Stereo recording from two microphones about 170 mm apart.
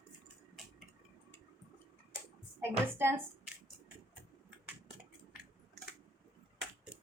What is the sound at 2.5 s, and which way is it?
Speech, 15° right (ahead or behind).